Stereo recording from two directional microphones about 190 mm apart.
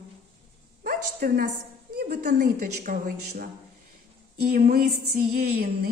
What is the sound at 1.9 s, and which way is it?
A woman's voice, 50° right (ahead or behind).